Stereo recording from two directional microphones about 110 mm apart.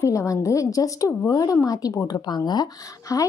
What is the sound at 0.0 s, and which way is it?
Speech, 30° left (ahead or behind).